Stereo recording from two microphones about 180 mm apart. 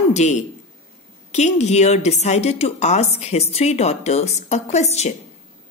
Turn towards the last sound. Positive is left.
turn(degrees=40)  # may be behind; listen again after turning